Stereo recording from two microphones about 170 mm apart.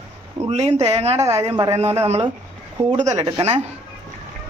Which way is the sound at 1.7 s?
40° right (ahead or behind).